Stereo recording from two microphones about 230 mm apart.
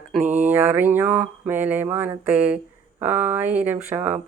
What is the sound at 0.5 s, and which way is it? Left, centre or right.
Speech, centre.